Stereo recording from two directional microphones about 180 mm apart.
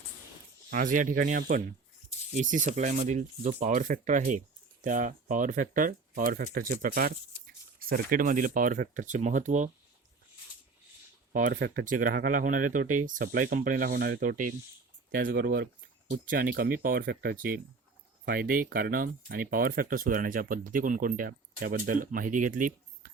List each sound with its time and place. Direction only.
0.7 s speech: 50° right (ahead or behind)
11.3 s speech: 50° right (ahead or behind)